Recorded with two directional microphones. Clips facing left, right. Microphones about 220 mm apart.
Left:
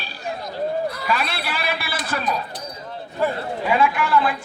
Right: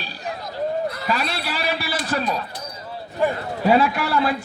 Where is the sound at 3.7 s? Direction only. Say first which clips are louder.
Right 2 dB; 40° right (ahead or behind).